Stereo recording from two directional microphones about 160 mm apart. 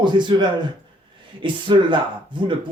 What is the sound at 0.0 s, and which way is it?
Speech, 30° right (ahead or behind).